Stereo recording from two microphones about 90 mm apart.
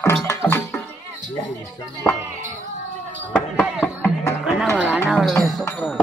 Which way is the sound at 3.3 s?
20° left (ahead or behind).